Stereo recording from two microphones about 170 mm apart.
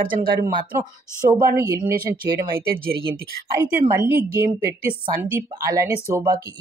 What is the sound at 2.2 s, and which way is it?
Speech, 60° right (ahead or behind).